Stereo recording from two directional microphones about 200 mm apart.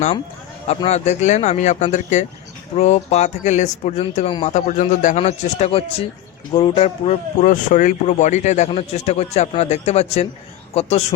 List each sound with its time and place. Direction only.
0.7 s speech: 30° left (ahead or behind)
4.5 s speech: 40° left (ahead or behind)